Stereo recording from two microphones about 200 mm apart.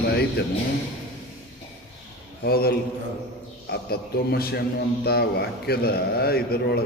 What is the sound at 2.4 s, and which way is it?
A man's voice, 50° left (ahead or behind).